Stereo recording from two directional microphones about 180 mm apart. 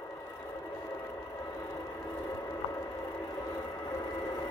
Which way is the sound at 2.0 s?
20° left (ahead or behind).